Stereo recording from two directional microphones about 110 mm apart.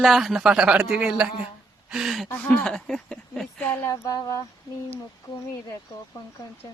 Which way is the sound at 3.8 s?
30° left (ahead or behind).